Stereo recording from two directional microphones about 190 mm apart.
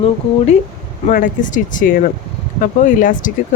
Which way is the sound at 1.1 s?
45° left (ahead or behind).